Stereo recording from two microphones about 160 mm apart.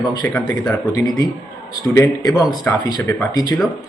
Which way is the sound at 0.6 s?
10° left (ahead or behind).